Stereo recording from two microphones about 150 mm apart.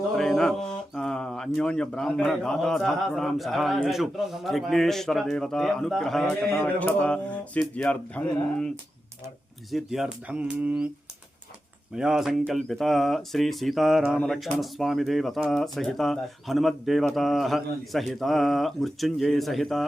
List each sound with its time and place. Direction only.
0.2 s speech: 5° left (ahead or behind)
6.5 s speech: 15° left (ahead or behind)
9.7 s speech: centre (ahead or behind)
11.9 s speech: 5° right (ahead or behind)